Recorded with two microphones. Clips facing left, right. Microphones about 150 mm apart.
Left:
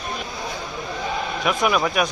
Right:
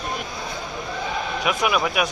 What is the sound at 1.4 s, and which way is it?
Speech, 5° right (ahead or behind).